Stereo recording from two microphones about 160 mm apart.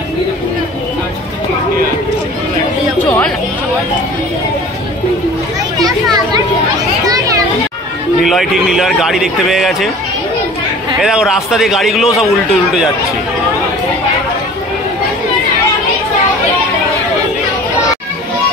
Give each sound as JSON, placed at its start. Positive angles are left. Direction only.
{"t": 5.9, "sound": "a child's voice", "side_deg": -25}
{"t": 7.1, "sound": "children playing", "side_deg": -20}
{"t": 8.2, "sound": "a man's voice", "side_deg": 0}
{"t": 11.0, "sound": "a man's voice", "side_deg": -5}